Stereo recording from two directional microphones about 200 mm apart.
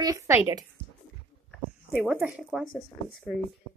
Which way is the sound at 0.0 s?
15° right (ahead or behind).